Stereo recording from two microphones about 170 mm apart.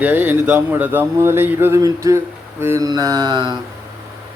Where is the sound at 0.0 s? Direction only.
10° right (ahead or behind).